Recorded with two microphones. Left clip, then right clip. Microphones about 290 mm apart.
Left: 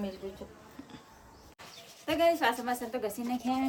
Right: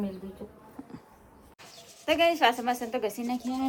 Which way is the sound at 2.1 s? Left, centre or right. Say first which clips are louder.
Right 4 dB; centre.